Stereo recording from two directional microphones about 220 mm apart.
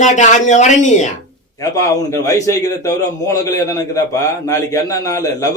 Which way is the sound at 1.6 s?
15° left (ahead or behind).